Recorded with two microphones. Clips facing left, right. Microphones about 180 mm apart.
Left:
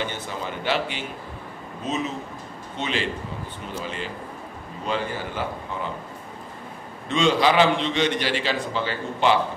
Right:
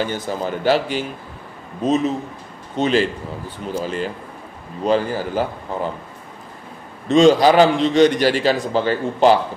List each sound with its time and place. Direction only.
0.0 s a man's voice: 40° right (ahead or behind)
2.8 s a man's voice: 40° right (ahead or behind)
7.1 s a man's voice: 40° right (ahead or behind)